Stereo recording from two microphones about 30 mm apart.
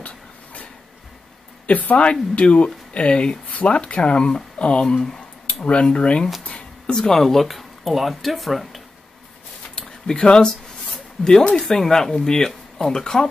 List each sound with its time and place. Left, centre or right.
0.0 s a sound: left
1.7 s speech: left
2.4 s speech: left
4.8 s speech: left
5.5 s speech: left
6.9 s speech: centre
9.8 s a sound: centre
10.2 s speech: left
11.2 s speech: centre